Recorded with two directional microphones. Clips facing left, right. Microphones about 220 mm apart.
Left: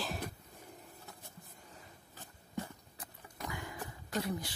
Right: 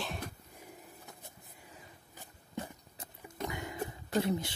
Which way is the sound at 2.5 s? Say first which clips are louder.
Even; 20° right (ahead or behind).